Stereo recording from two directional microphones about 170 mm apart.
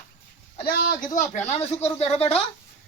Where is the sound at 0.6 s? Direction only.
60° left (ahead or behind); by 2.4 s 35° left (ahead or behind).